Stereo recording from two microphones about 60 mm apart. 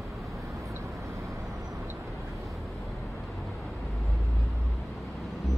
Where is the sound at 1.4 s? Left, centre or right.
Centre.